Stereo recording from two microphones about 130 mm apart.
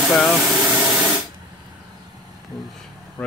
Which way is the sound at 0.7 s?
10° right (ahead or behind).